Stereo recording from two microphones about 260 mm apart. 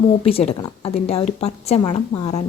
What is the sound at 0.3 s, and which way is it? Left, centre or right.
A woman's voice, left.